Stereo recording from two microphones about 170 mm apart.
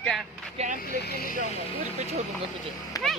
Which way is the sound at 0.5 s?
45° right (ahead or behind).